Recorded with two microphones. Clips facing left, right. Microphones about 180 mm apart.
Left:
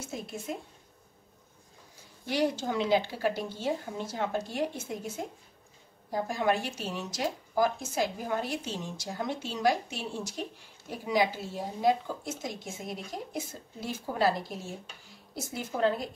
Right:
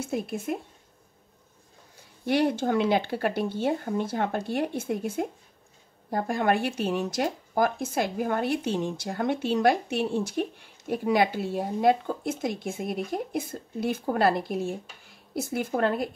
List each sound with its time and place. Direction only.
0.0 s speech: 60° right (ahead or behind)
2.2 s speech: 60° right (ahead or behind)